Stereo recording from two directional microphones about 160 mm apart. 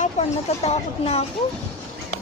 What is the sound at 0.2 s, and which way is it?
Speech, 50° left (ahead or behind).